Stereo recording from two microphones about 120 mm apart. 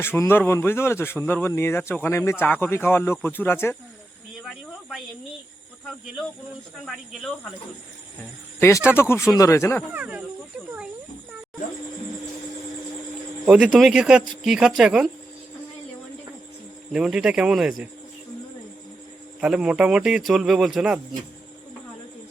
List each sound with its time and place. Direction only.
0.0 s speech: 20° left (ahead or behind)
4.4 s a sound: centre (ahead or behind)
6.8 s speech: centre (ahead or behind)
8.5 s speech: 20° left (ahead or behind)
9.9 s speech: 10° right (ahead or behind)
13.4 s speech: 10° right (ahead or behind)
16.9 s speech: 5° right (ahead or behind)
19.4 s speech: 10° right (ahead or behind)